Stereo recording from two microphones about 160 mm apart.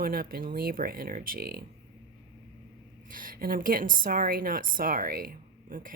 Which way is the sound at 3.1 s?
60° right (ahead or behind).